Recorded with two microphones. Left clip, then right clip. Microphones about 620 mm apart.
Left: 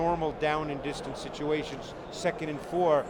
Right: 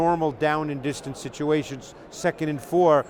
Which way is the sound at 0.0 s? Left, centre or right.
Right.